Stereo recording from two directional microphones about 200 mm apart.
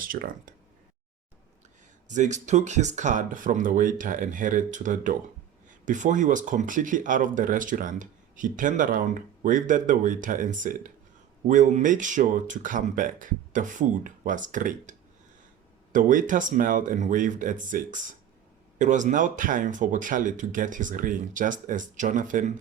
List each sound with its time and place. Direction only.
0.0 s speech: 45° right (ahead or behind)
2.0 s speech: 35° right (ahead or behind)